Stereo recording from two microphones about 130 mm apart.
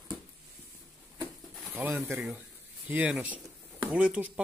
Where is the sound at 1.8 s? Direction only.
15° right (ahead or behind).